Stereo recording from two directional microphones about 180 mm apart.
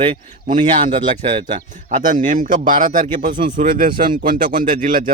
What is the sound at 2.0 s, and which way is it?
Speech, 45° right (ahead or behind).